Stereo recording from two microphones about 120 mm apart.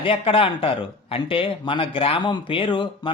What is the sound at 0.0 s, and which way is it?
Speech, 50° left (ahead or behind).